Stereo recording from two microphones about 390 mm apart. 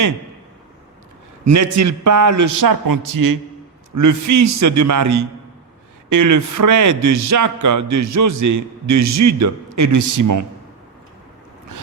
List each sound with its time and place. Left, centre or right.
1.5 s a man's voice: right